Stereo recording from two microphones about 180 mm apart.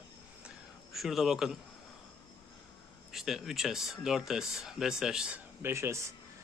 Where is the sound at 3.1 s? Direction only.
Centre (ahead or behind).